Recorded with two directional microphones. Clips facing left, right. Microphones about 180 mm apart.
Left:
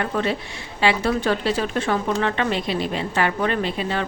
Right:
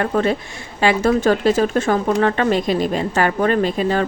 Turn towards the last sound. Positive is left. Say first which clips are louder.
# right 6 dB
turn(degrees=-45)  # may be behind; listen again after turning